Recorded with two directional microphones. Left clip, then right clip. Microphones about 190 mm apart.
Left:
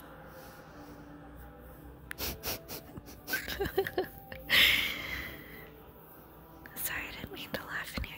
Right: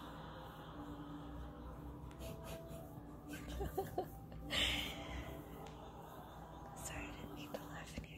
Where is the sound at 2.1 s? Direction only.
45° left (ahead or behind).